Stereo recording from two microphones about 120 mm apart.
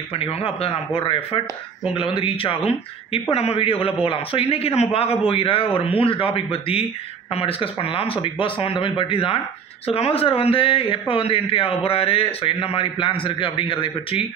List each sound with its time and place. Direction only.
0.1 s a man's voice: 50° left (ahead or behind)